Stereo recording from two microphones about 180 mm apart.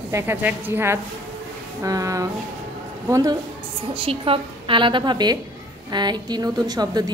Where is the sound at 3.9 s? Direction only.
30° right (ahead or behind).